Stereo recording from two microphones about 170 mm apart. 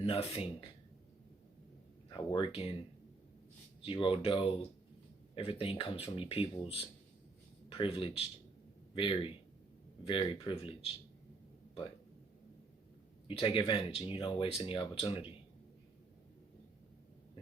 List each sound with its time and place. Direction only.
0.0 s speech: 35° left (ahead or behind)
2.0 s speech: 25° left (ahead or behind)
3.8 s speech: 30° left (ahead or behind)
13.2 s speech: 30° left (ahead or behind)